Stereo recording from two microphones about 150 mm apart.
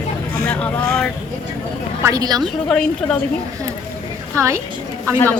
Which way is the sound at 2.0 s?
25° right (ahead or behind).